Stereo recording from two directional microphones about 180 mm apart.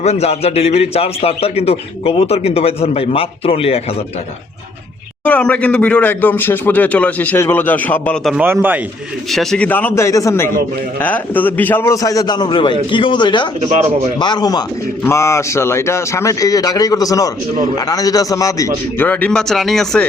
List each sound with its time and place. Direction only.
0.0 s a man's voice: 35° left (ahead or behind)
5.2 s a man's voice: 10° left (ahead or behind); by 8.8 s 10° right (ahead or behind)
9.3 s speech: centre (ahead or behind); by 13.5 s 25° left (ahead or behind)
13.6 s speech: 40° right (ahead or behind)
14.2 s speech: 25° left (ahead or behind); by 20.1 s 5° left (ahead or behind)